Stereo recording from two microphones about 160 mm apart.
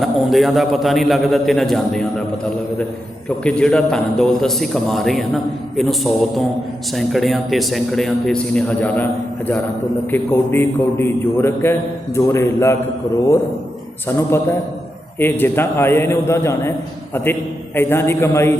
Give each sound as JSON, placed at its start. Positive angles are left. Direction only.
{"t": 0.0, "sound": "a man's voice", "side_deg": 0}
{"t": 3.2, "sound": "a man's voice", "side_deg": 5}
{"t": 10.1, "sound": "a man's voice", "side_deg": 15}
{"t": 14.2, "sound": "a man's voice", "side_deg": 15}
{"t": 17.7, "sound": "a man's voice", "side_deg": 15}